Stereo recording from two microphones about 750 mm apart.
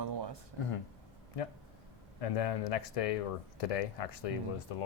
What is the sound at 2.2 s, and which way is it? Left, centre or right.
Speech, left.